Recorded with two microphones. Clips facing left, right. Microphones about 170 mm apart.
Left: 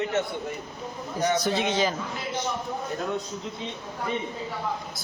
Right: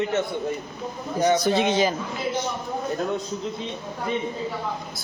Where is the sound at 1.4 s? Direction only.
15° right (ahead or behind).